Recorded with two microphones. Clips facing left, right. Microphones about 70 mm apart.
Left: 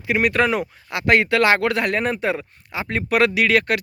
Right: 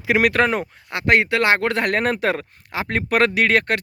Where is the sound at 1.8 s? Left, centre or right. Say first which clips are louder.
Right 1 dB; right.